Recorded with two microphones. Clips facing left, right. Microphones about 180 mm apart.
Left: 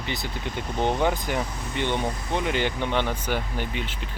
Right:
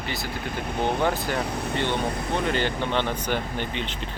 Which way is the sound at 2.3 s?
15° left (ahead or behind).